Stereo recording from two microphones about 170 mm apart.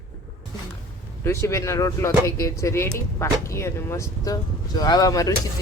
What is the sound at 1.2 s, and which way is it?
Speech, 15° left (ahead or behind).